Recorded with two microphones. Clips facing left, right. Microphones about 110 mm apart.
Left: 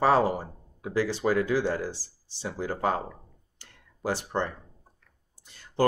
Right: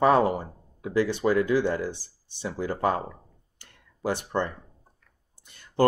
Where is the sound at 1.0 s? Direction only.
55° right (ahead or behind).